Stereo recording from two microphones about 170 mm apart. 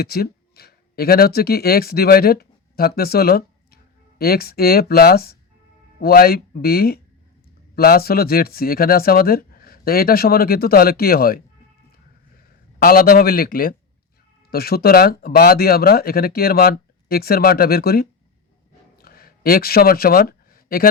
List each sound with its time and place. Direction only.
0.0 s speech: 65° left (ahead or behind)
12.8 s speech: 60° left (ahead or behind)
18.9 s a sound: 60° left (ahead or behind)